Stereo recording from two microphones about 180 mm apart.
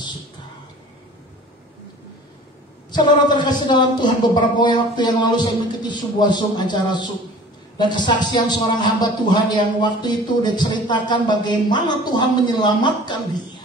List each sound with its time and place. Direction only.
2.9 s speech: 25° left (ahead or behind)